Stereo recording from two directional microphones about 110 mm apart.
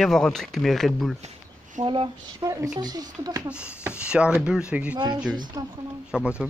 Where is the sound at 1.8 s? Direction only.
40° right (ahead or behind).